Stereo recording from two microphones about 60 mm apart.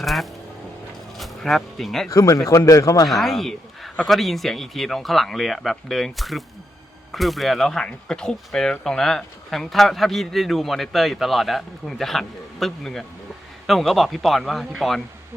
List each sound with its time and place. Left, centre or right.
0.0 s vehicle: centre
1.2 s speech: centre
2.0 s speech: left
3.1 s a man's voice: centre